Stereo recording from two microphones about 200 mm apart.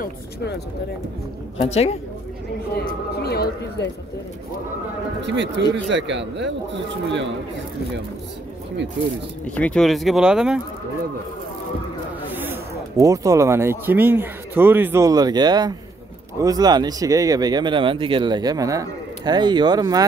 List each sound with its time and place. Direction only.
0.0 s speech: 55° left (ahead or behind)
1.6 s a woman's voice: 30° left (ahead or behind)
2.9 s speech: 55° left (ahead or behind)
5.2 s speech: 60° right (ahead or behind)
9.6 s speech: 5° left (ahead or behind)
12.4 s speech: 15° right (ahead or behind)